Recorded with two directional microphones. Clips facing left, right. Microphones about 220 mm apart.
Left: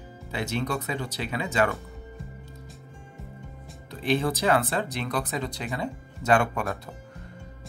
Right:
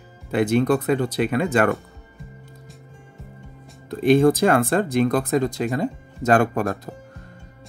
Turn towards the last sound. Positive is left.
turn(degrees=-40)  # may be behind; listen again after turning